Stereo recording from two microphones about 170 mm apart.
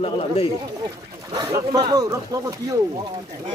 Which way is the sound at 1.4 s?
25° right (ahead or behind).